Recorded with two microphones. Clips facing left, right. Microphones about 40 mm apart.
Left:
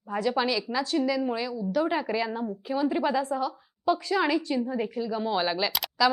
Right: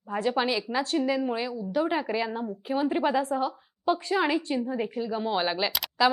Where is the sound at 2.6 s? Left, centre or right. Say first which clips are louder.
Right 1 dB; right; by 5.7 s centre.